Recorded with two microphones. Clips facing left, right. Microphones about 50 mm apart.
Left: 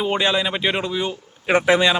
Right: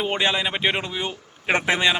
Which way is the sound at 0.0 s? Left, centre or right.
Centre.